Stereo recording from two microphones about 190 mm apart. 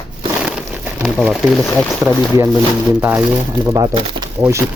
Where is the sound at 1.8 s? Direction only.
Centre (ahead or behind).